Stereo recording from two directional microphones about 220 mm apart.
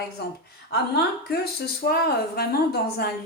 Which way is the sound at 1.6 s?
45° left (ahead or behind).